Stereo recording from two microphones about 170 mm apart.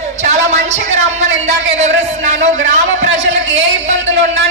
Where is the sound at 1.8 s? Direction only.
40° right (ahead or behind).